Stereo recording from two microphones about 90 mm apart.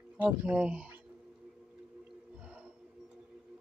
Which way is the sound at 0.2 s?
15° right (ahead or behind).